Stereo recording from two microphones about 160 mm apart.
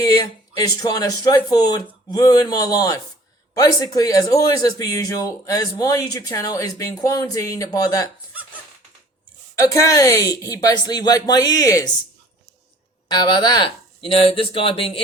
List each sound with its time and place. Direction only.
0.0 s speech: 20° left (ahead or behind)
9.6 s speech: 20° left (ahead or behind)
13.1 s speech: 30° left (ahead or behind)